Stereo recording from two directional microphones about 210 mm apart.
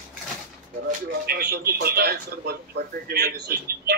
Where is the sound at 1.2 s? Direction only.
50° right (ahead or behind).